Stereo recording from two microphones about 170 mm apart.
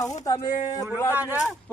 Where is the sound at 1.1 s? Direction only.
10° right (ahead or behind).